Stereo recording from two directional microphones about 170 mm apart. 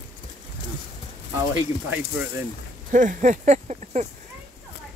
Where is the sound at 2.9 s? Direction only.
50° right (ahead or behind).